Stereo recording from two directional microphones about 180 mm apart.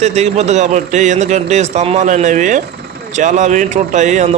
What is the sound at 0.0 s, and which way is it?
A man's voice, 40° right (ahead or behind).